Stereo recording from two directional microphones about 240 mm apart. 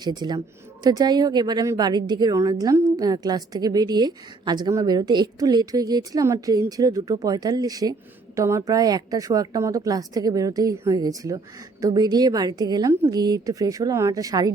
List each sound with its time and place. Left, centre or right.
0.0 s a woman's voice: centre